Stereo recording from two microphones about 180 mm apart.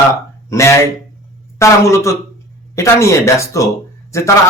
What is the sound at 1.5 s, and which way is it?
A man's voice, 15° left (ahead or behind).